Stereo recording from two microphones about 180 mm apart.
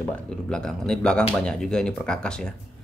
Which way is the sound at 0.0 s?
5° left (ahead or behind).